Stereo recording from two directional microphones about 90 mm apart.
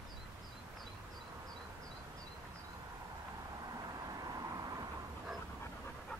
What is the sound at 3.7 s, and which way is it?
Vehicle, 45° right (ahead or behind).